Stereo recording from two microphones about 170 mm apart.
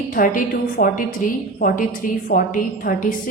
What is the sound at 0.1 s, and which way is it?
A woman's voice, 55° left (ahead or behind).